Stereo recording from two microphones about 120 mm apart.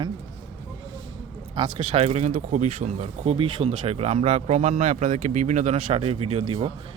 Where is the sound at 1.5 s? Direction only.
40° right (ahead or behind); by 3.3 s 65° right (ahead or behind).